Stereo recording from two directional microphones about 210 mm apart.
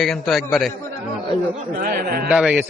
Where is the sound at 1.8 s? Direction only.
45° right (ahead or behind).